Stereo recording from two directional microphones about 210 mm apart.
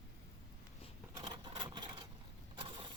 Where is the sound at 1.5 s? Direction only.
25° right (ahead or behind).